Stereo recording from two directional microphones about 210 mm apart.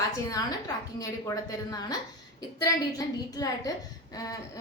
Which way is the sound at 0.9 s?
15° left (ahead or behind).